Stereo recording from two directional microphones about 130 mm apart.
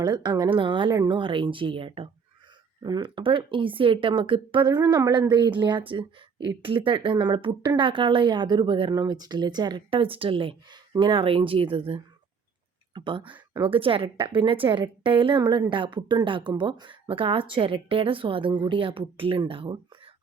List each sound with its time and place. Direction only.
0.0 s speech: 35° right (ahead or behind)
9.0 s speech: 30° right (ahead or behind)